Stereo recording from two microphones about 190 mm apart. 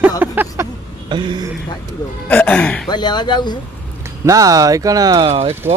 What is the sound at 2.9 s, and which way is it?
Speech, 20° left (ahead or behind).